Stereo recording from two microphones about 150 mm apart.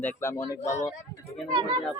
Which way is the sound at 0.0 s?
20° left (ahead or behind).